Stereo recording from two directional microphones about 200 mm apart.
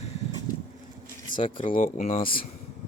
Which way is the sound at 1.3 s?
40° left (ahead or behind).